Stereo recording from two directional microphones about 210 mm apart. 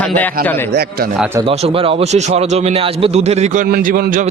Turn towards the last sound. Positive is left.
turn(degrees=-45)  # may be behind; listen again after turning